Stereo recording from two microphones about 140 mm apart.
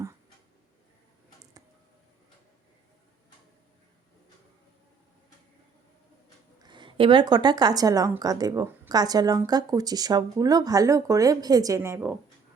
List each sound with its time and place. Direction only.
6.6 s speech: 35° right (ahead or behind); by 12.1 s 15° right (ahead or behind)